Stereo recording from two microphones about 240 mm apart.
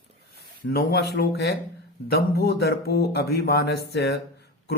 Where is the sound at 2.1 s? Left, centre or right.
Left.